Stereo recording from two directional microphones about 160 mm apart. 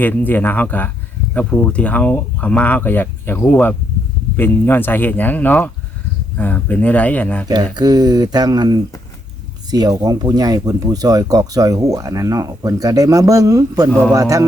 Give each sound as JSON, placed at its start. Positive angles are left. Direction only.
{"t": 0.0, "sound": "speech", "side_deg": 10}
{"t": 7.4, "sound": "speech", "side_deg": -25}